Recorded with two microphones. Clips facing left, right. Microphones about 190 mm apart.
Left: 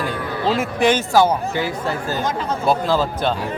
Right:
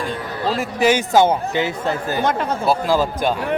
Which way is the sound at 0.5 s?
Centre (ahead or behind).